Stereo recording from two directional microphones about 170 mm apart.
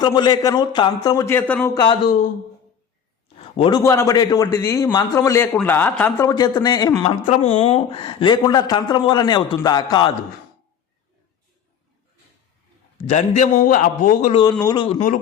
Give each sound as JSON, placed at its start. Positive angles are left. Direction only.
{"t": 0.0, "sound": "a man's voice", "side_deg": 25}
{"t": 1.7, "sound": "a man's voice", "side_deg": 25}
{"t": 3.6, "sound": "a man's voice", "side_deg": 25}
{"t": 6.1, "sound": "a man's voice", "side_deg": 20}
{"t": 7.9, "sound": "a man's voice", "side_deg": 30}
{"t": 13.1, "sound": "a man's voice", "side_deg": 45}
{"t": 14.6, "sound": "a man's voice", "side_deg": 25}
{"t": 14.9, "sound": "a man's voice", "side_deg": 50}